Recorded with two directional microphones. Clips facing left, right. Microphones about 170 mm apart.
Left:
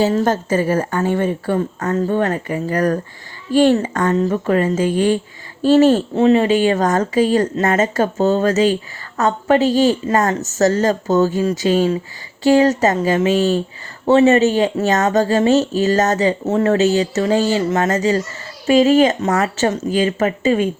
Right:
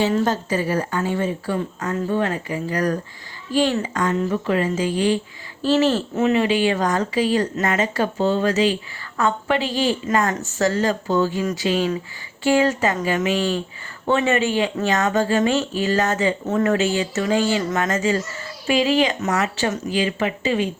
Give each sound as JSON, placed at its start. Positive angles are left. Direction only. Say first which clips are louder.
{"t": 0.0, "sound": "a woman's voice", "louder": "left 4 dB", "side_deg": 40}
{"t": 6.1, "sound": "a woman's voice", "louder": "left 5 dB", "side_deg": 35}
{"t": 19.2, "sound": "a woman's voice", "louder": "left 5 dB", "side_deg": 35}